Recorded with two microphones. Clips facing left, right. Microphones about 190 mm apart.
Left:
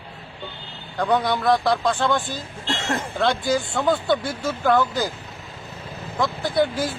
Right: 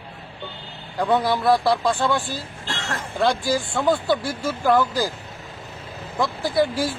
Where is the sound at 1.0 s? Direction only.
5° right (ahead or behind).